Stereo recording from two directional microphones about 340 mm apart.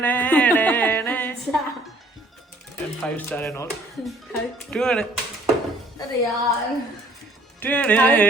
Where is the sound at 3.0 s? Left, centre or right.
Centre.